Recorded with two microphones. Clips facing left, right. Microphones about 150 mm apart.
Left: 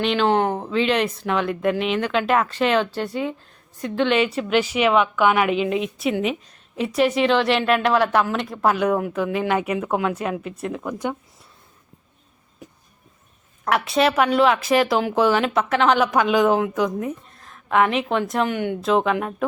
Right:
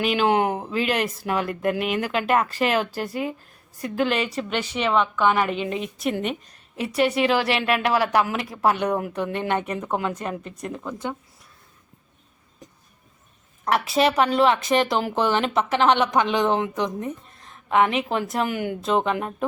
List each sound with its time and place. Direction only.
0.0 s a woman's voice: 5° right (ahead or behind); by 11.1 s 15° left (ahead or behind)
13.7 s speech: centre (ahead or behind)